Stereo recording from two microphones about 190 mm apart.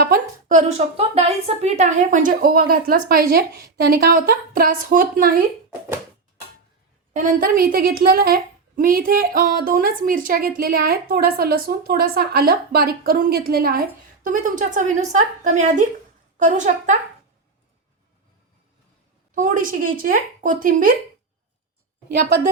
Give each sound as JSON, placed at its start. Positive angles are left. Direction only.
{"t": 0.0, "sound": "a woman's voice", "side_deg": -45}
{"t": 7.1, "sound": "a woman's voice", "side_deg": -45}
{"t": 19.3, "sound": "a woman's voice", "side_deg": -45}